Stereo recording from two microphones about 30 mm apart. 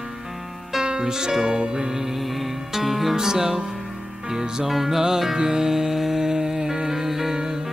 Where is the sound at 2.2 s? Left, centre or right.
Centre.